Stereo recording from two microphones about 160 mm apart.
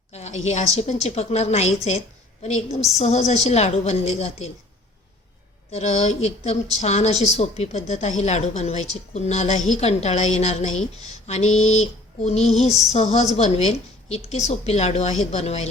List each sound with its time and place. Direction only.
0.1 s a woman's voice: 45° left (ahead or behind)
5.7 s a woman's voice: 45° left (ahead or behind)